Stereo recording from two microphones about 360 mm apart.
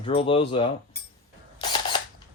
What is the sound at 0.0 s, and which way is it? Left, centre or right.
Speech, centre.